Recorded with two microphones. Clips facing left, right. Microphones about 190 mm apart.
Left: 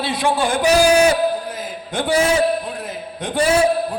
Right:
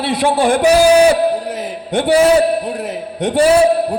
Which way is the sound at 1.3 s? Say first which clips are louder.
Right 5 dB; 70° right (ahead or behind).